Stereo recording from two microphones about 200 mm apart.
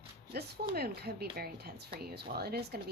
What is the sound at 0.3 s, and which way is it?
Speech, 55° right (ahead or behind).